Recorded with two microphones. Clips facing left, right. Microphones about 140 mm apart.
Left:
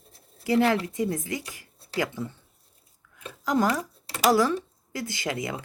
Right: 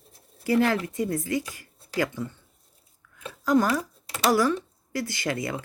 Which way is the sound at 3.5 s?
20° left (ahead or behind).